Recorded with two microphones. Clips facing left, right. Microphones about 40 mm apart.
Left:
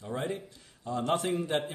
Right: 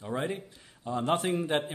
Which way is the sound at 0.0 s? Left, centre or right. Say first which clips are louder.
Right 2 dB; centre.